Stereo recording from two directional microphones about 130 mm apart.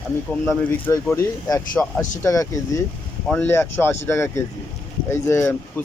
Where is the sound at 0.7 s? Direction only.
20° left (ahead or behind).